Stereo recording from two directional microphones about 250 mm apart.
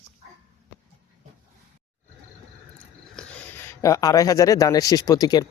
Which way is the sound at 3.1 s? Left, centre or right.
Centre.